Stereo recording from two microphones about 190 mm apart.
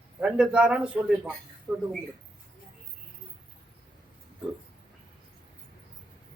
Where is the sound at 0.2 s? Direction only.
5° right (ahead or behind).